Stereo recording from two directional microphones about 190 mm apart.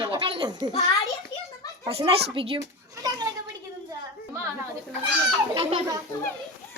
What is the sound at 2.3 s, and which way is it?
Speech, 30° right (ahead or behind).